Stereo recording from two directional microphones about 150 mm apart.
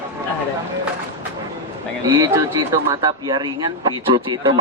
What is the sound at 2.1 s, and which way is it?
A man's voice, 20° right (ahead or behind).